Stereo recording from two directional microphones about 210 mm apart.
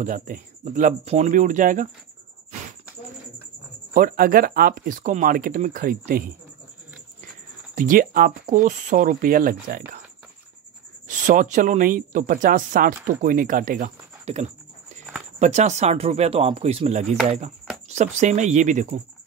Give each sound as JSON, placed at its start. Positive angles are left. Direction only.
{"t": 0.0, "sound": "speech", "side_deg": -40}
{"t": 3.9, "sound": "speech", "side_deg": -40}
{"t": 7.7, "sound": "speech", "side_deg": -40}
{"t": 11.1, "sound": "speech", "side_deg": -35}